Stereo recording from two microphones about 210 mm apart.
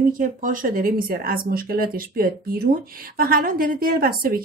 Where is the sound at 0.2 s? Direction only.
40° right (ahead or behind).